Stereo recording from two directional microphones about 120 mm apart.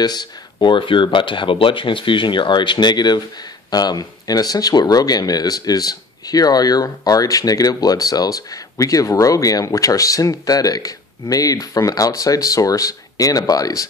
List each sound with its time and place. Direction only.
0.0 s speech: 35° left (ahead or behind)